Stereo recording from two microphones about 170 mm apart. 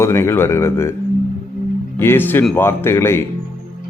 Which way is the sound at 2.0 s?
15° left (ahead or behind).